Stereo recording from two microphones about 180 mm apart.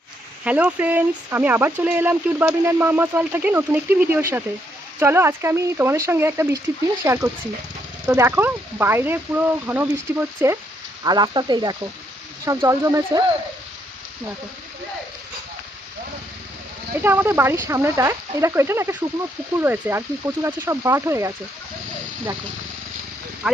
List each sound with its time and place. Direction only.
0.4 s speech: 10° right (ahead or behind)
17.0 s speech: 10° right (ahead or behind)